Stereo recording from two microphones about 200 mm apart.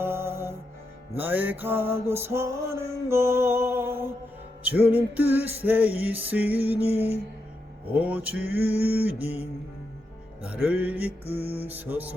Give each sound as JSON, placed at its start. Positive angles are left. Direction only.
{"t": 0.0, "sound": "music", "side_deg": -10}
{"t": 7.9, "sound": "music", "side_deg": -5}
{"t": 10.4, "sound": "music", "side_deg": -5}
{"t": 11.3, "sound": "mantra", "side_deg": -30}
{"t": 11.7, "sound": "music", "side_deg": -10}